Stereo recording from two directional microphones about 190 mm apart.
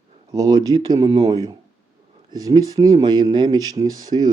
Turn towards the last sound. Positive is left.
turn(degrees=-20)  # may be behind; listen again after turning